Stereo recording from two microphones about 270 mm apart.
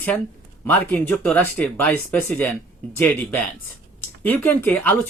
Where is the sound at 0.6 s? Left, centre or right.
Centre.